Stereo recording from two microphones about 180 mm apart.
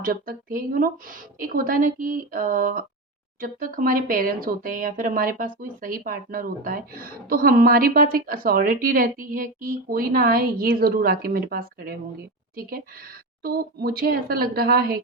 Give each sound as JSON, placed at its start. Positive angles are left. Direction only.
{"t": 0.0, "sound": "speech", "side_deg": -50}
{"t": 13.4, "sound": "a woman's voice", "side_deg": -60}